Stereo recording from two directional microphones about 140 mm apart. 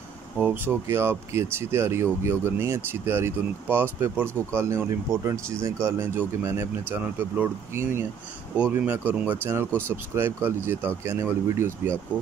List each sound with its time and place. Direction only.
0.4 s speech: 15° right (ahead or behind)